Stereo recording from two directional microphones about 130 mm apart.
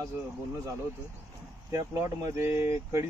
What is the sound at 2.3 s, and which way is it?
Speech, 20° right (ahead or behind).